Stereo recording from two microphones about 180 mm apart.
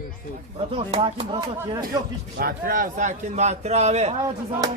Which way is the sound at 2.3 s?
50° right (ahead or behind).